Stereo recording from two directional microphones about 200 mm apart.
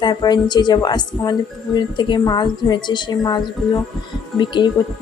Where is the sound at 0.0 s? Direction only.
20° left (ahead or behind).